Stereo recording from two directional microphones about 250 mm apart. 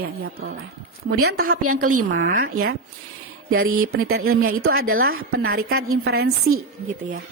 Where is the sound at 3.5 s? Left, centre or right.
Right.